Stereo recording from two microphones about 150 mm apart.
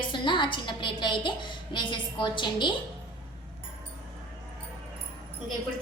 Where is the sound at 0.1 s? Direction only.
30° left (ahead or behind).